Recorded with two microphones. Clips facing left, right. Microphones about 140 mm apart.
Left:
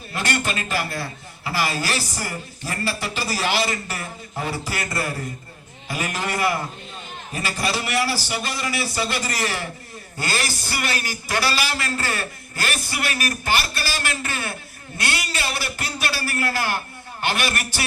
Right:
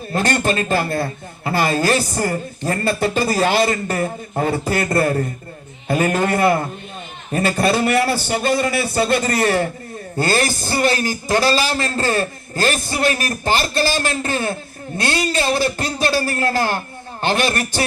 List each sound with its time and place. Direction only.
0.1 s a man's voice: 45° right (ahead or behind)
10.7 s a man's voice: 30° right (ahead or behind)